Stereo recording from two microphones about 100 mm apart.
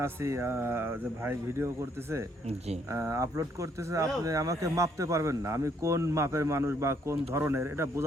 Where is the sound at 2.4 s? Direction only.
90° right.